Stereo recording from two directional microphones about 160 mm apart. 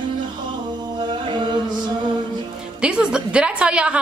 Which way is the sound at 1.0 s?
30° right (ahead or behind).